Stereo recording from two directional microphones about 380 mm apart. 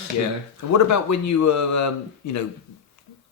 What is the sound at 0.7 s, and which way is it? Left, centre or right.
Speech, left.